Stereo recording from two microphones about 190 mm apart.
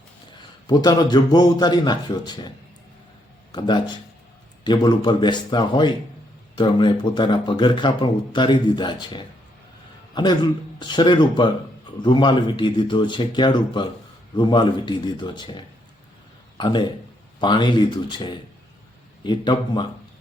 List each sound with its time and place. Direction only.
0.7 s speech: 20° left (ahead or behind)
3.5 s a man's voice: 25° left (ahead or behind)